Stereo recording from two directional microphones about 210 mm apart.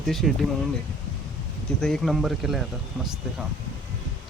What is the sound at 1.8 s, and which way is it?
Speech, 5° left (ahead or behind).